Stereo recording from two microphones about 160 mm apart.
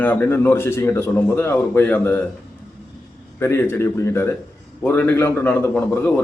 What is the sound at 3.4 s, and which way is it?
A man's voice, 15° left (ahead or behind).